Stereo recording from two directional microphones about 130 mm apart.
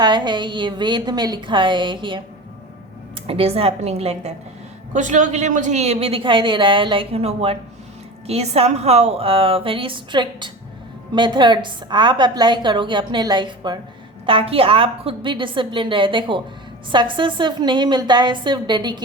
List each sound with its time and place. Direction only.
0.0 s a woman's voice: 35° right (ahead or behind)
3.2 s a man's voice: 50° right (ahead or behind)
4.9 s a man's voice: 70° right (ahead or behind); by 19.0 s 35° right (ahead or behind)